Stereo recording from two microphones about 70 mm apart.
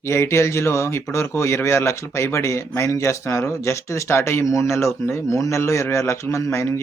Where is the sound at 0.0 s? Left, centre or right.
Left.